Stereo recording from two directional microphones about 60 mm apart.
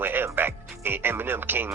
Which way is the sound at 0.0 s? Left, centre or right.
Right.